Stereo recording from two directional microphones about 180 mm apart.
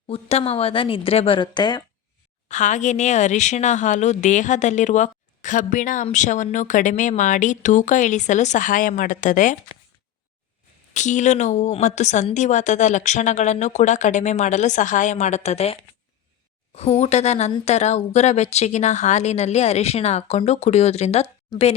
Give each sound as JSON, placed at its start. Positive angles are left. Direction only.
{"t": 0.1, "sound": "a woman's voice", "side_deg": 35}
{"t": 2.5, "sound": "speech", "side_deg": 40}
{"t": 10.9, "sound": "a woman's voice", "side_deg": 40}